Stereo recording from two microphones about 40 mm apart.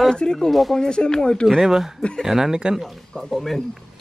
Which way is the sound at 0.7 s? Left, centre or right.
Centre.